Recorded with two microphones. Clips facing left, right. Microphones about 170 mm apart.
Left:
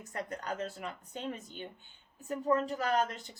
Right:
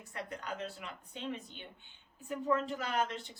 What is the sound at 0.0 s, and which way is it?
Speech, 40° left (ahead or behind).